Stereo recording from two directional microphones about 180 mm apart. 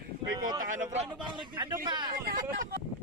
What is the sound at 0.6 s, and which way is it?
Speech, 45° right (ahead or behind).